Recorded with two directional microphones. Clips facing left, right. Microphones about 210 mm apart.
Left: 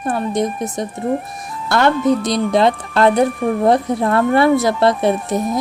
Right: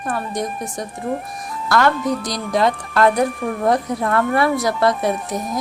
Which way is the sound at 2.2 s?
25° left (ahead or behind).